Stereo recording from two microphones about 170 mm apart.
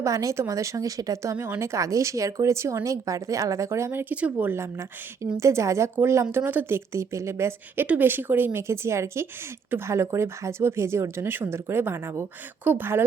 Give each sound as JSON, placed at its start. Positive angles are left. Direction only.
{"t": 0.0, "sound": "speech", "side_deg": -20}